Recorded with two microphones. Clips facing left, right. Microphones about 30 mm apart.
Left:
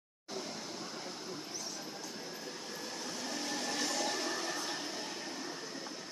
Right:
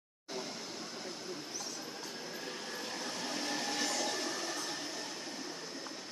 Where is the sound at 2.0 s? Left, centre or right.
Right.